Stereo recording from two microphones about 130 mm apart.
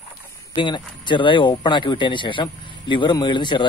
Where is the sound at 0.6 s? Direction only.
35° left (ahead or behind).